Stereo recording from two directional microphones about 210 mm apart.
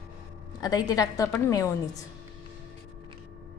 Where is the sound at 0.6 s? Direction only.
20° left (ahead or behind).